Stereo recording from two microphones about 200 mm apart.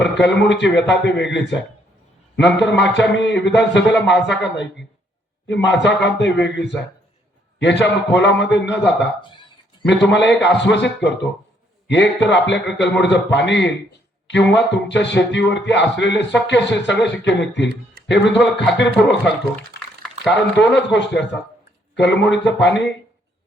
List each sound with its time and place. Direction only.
0.0 s a man's voice: 60° left (ahead or behind)
20.6 s speech: 60° left (ahead or behind)